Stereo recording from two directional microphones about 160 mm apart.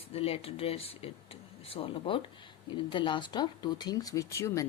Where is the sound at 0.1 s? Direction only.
35° left (ahead or behind).